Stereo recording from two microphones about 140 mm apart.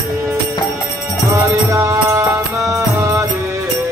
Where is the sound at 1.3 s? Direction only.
20° right (ahead or behind).